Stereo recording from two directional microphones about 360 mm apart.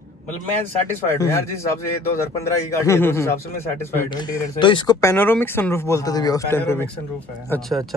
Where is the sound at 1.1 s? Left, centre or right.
Centre.